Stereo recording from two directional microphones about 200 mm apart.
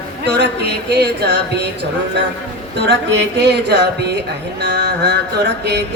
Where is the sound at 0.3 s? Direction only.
60° right (ahead or behind).